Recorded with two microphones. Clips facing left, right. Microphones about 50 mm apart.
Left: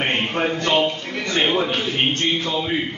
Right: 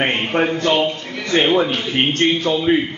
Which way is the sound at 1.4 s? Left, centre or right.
Centre.